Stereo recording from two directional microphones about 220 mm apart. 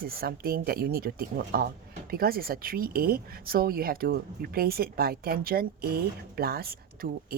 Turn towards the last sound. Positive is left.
turn(degrees=-45)  # may be behind; listen again after turning